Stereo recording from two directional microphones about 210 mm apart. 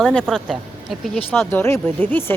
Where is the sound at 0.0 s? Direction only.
5° left (ahead or behind).